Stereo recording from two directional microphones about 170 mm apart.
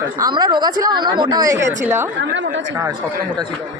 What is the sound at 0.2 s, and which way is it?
A woman's voice, 25° right (ahead or behind).